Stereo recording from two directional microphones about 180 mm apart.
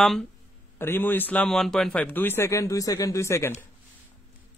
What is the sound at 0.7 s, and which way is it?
A man's voice, 10° left (ahead or behind).